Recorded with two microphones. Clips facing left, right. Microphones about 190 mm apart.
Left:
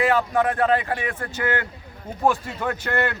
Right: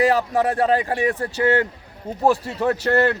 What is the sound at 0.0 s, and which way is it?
A man's voice, 35° right (ahead or behind).